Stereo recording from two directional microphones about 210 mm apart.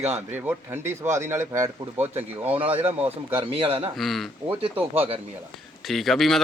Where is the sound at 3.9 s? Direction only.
Centre (ahead or behind).